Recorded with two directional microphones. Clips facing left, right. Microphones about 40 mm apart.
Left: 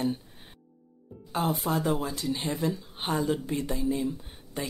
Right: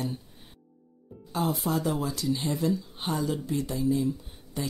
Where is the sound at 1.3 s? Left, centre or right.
Left.